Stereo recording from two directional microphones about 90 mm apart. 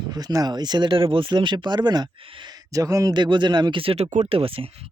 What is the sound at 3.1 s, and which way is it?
Speech, 55° right (ahead or behind).